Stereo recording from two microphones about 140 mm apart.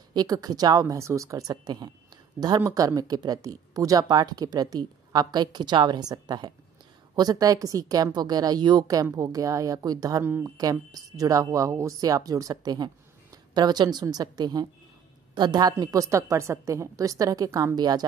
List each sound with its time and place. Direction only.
0.1 s speech: 30° right (ahead or behind)
10.2 s speech: 15° right (ahead or behind)
10.6 s speech: 25° right (ahead or behind)